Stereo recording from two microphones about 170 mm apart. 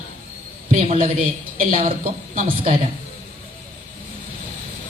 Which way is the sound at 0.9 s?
55° right (ahead or behind).